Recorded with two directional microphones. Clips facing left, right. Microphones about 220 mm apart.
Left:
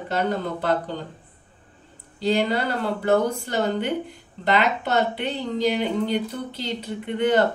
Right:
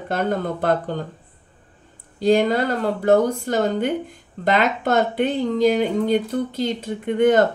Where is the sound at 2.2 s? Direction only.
50° right (ahead or behind).